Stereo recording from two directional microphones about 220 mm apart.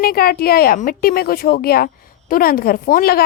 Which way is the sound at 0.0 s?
45° left (ahead or behind).